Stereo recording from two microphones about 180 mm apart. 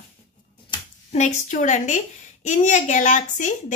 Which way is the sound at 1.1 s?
40° left (ahead or behind).